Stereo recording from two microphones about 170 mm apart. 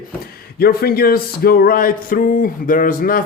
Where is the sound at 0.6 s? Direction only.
65° left (ahead or behind).